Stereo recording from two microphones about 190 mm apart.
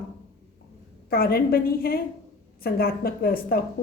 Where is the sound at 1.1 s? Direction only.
55° left (ahead or behind).